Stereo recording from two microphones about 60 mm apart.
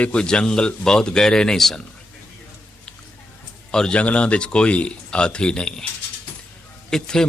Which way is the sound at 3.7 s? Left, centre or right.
Centre.